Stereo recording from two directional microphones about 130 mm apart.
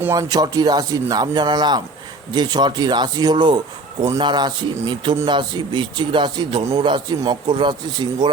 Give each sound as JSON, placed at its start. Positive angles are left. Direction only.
{"t": 0.0, "sound": "speech", "side_deg": -25}